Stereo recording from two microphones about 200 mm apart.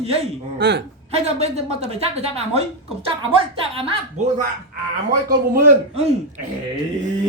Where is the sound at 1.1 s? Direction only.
30° right (ahead or behind).